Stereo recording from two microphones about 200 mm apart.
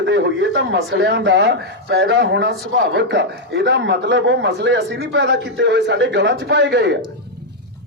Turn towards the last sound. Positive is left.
turn(degrees=-60)  # may be behind; listen again after turning